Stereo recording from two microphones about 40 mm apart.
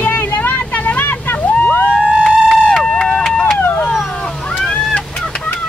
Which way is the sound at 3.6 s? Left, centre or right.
Left.